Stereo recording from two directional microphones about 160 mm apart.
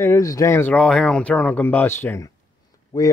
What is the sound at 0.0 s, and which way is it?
Speech, 20° left (ahead or behind).